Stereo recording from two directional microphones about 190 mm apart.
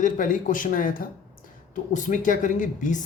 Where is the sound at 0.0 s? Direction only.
45° left (ahead or behind).